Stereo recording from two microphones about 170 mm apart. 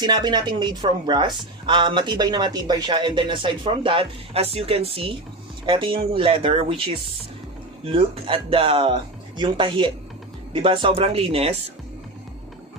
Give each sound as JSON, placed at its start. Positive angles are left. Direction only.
{"t": 0.0, "sound": "speech", "side_deg": -25}